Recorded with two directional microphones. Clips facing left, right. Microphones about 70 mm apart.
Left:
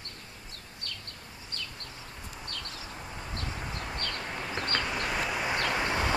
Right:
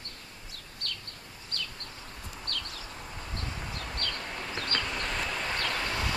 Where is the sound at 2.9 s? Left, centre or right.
Centre.